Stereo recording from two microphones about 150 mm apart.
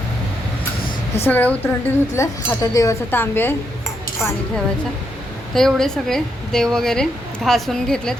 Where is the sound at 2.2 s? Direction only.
20° left (ahead or behind).